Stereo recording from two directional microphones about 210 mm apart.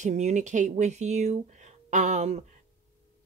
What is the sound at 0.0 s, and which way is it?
Speech, 35° right (ahead or behind).